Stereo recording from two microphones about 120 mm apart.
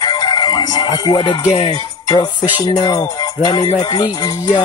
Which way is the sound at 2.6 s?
35° left (ahead or behind).